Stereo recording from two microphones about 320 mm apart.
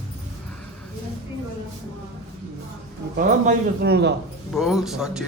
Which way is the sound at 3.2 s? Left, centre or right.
Right.